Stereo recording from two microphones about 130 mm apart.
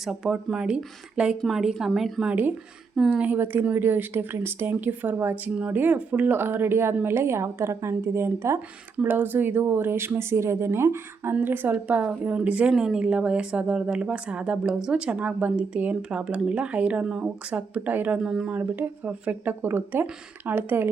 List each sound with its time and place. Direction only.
0.0 s speech: 5° right (ahead or behind)